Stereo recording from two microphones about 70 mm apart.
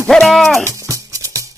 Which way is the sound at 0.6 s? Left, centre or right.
Right.